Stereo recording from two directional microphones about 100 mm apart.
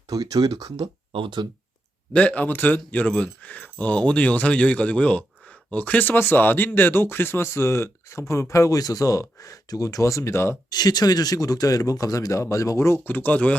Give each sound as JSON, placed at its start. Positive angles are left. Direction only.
{"t": 0.1, "sound": "speech", "side_deg": -40}
{"t": 1.1, "sound": "speech", "side_deg": -55}
{"t": 2.1, "sound": "speech", "side_deg": 15}
{"t": 10.7, "sound": "speech", "side_deg": 45}